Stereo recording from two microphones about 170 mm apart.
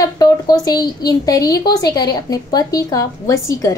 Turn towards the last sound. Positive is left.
turn(degrees=20)  # may be behind; listen again after turning